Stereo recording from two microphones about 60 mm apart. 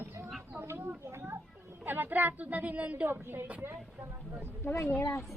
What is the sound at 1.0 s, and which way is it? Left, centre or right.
Speech, right.